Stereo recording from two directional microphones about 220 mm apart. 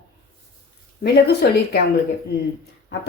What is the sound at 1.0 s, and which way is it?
Speech, 50° left (ahead or behind).